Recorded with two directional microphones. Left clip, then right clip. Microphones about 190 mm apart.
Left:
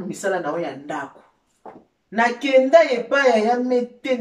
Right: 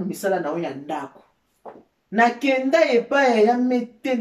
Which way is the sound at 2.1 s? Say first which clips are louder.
Left 1 dB; 5° right (ahead or behind).